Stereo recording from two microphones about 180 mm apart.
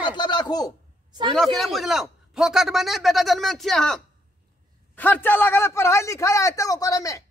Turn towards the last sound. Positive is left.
turn(degrees=20)  # may be behind; listen again after turning